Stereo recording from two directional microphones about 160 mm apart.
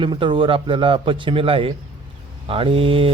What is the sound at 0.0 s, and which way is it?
Speech, 30° right (ahead or behind).